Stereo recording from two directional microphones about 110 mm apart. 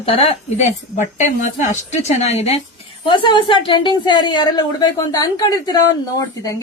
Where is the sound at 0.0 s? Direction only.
60° left (ahead or behind); by 2.6 s 85° left.